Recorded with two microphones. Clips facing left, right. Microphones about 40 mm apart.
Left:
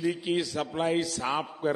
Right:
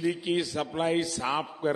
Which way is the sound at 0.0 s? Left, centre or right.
Centre.